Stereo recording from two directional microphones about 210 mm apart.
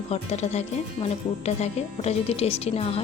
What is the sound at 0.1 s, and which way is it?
Speech, 30° left (ahead or behind).